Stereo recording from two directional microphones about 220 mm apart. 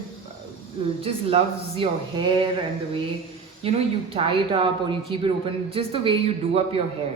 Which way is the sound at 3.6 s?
25° right (ahead or behind).